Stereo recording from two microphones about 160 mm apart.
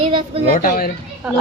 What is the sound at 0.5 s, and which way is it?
Speech, 60° left (ahead or behind).